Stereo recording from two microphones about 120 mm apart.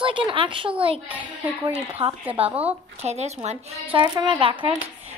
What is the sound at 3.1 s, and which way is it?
Speech, 65° right (ahead or behind).